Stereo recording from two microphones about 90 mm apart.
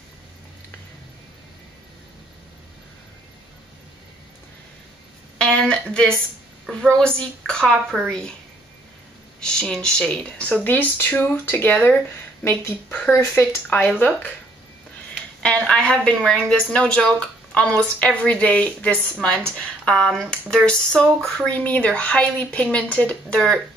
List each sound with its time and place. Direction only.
5.4 s a woman's voice: 10° left (ahead or behind)
9.4 s a woman's voice: 10° left (ahead or behind); by 13.0 s 30° left (ahead or behind)
13.0 s speech: centre (ahead or behind)
13.7 s speech: 20° left (ahead or behind)
15.4 s a woman's voice: 10° left (ahead or behind)